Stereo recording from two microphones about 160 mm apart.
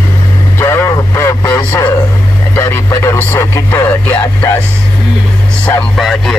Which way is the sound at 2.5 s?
15° left (ahead or behind).